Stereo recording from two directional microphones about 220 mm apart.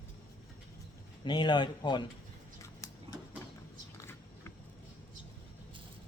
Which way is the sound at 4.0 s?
10° left (ahead or behind).